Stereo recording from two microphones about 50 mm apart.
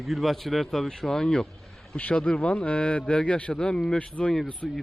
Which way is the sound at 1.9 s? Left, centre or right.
Left.